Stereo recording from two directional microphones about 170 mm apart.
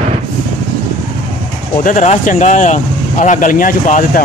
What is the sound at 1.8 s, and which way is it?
Speech, 45° left (ahead or behind).